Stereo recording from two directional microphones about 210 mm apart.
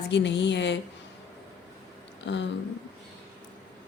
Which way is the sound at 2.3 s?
60° left (ahead or behind).